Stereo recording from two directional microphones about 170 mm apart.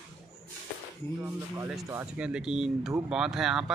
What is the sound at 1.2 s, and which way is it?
Speech, 15° right (ahead or behind).